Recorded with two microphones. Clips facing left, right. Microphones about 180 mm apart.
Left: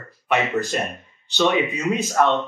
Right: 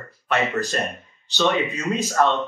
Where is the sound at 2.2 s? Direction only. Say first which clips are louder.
Left 1 dB; 10° left (ahead or behind).